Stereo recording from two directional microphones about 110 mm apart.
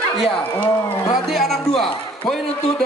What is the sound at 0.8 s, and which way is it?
Speech, 30° left (ahead or behind).